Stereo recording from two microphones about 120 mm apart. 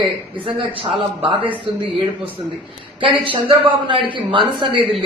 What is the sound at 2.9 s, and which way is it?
A man's voice, 45° right (ahead or behind).